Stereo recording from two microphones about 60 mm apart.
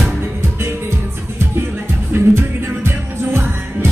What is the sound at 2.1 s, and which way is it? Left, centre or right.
Music, right.